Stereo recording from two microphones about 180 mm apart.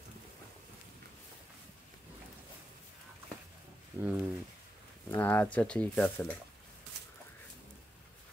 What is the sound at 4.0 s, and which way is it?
Speech, 10° right (ahead or behind).